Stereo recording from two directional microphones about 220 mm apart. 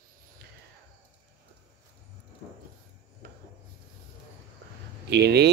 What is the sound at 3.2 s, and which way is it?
Rub, 50° right (ahead or behind).